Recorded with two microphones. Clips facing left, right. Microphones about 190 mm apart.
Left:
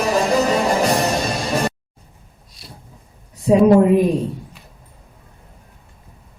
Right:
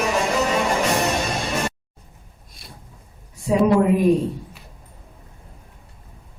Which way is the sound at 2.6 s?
55° right (ahead or behind).